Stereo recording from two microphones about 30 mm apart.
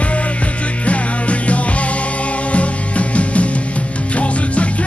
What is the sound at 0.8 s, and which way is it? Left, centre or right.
Music, left.